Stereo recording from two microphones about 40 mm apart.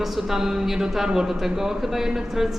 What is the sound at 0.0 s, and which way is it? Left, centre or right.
Speech, centre.